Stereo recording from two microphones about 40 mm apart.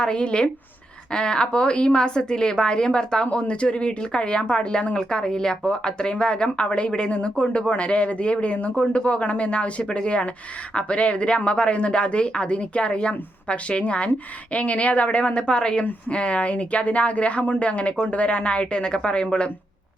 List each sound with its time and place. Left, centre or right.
0.0 s speech: left